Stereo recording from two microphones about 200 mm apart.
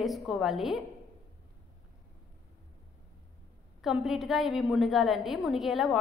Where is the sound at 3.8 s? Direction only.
Centre (ahead or behind).